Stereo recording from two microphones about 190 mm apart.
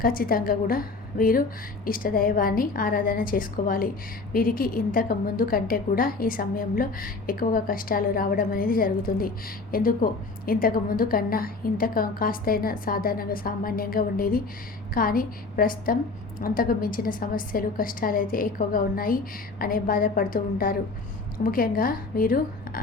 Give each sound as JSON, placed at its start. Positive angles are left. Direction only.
{"t": 0.0, "sound": "a woman's voice", "side_deg": 50}